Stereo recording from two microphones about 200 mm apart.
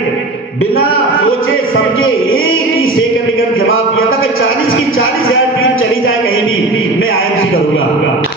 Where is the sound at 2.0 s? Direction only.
90° left.